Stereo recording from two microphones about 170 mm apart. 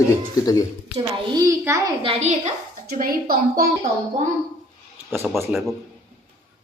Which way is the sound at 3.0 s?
60° right (ahead or behind).